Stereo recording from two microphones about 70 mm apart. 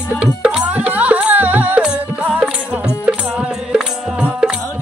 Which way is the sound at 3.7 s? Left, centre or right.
Centre.